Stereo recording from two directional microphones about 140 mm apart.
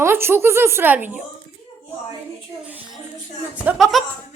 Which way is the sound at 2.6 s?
10° right (ahead or behind).